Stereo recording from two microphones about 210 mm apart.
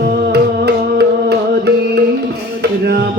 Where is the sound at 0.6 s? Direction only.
50° right (ahead or behind).